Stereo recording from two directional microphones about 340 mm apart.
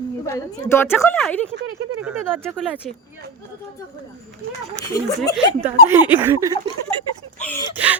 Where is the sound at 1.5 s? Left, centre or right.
Right.